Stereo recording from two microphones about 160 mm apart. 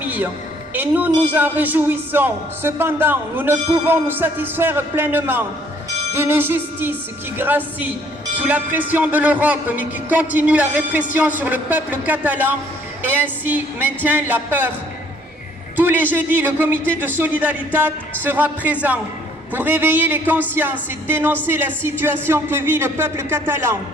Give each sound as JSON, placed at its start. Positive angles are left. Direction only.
{"t": 0.0, "sound": "a sound", "side_deg": -10}
{"t": 0.7, "sound": "music", "side_deg": -10}
{"t": 15.7, "sound": "music", "side_deg": -10}